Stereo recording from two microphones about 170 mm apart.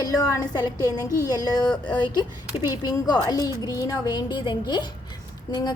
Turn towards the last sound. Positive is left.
turn(degrees=25)  # may be behind; listen again after turning